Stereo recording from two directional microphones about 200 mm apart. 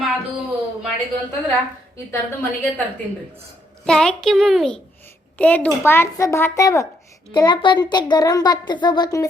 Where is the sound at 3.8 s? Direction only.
5° left (ahead or behind).